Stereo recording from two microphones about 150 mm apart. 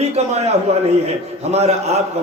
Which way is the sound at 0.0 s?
45° right (ahead or behind).